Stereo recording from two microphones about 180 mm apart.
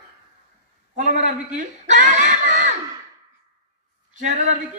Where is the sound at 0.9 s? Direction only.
45° right (ahead or behind).